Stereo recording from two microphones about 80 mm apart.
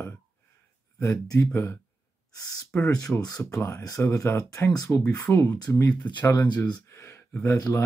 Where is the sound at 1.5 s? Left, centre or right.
Left.